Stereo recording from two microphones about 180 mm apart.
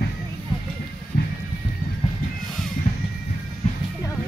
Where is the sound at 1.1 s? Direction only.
55° left (ahead or behind).